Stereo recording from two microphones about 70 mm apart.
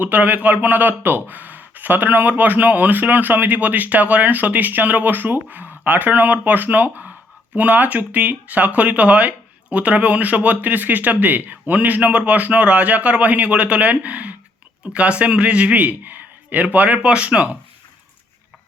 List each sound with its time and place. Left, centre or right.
0.0 s a man's voice: right